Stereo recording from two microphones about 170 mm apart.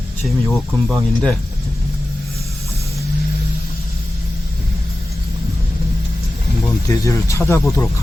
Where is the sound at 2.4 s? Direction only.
20° right (ahead or behind).